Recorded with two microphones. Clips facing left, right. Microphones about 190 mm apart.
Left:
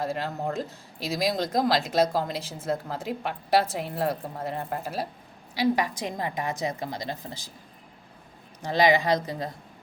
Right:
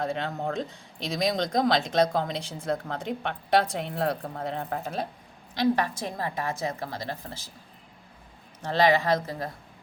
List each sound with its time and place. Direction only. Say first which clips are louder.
0.0 s a woman's voice: even; 5° left (ahead or behind)
8.6 s a woman's voice: left 1 dB; 15° left (ahead or behind)